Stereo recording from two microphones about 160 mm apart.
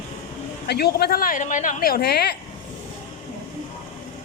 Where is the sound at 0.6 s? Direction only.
90° left.